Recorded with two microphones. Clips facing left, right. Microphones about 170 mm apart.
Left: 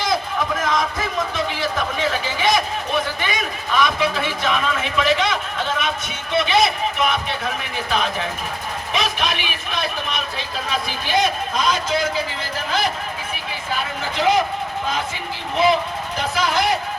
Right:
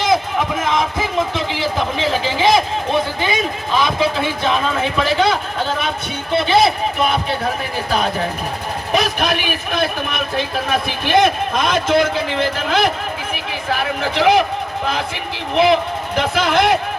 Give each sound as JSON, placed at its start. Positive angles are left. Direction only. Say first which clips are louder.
{"t": 0.1, "sound": "a sound", "louder": "right 5 dB", "side_deg": -20}
{"t": 1.6, "sound": "a man's voice", "louder": "right 4 dB", "side_deg": -25}
{"t": 9.1, "sound": "speech", "louder": "right 5 dB", "side_deg": -50}
{"t": 13.7, "sound": "a man's voice", "louder": "right 6 dB", "side_deg": -75}
{"t": 16.1, "sound": "speech", "louder": "right 5 dB", "side_deg": -60}